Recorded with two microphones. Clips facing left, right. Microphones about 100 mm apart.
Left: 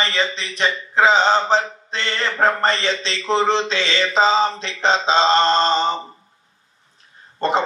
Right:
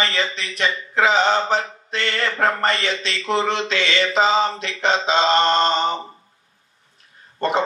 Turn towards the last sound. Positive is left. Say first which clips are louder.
# left 1 dB
turn(degrees=30)  # may be behind; listen again after turning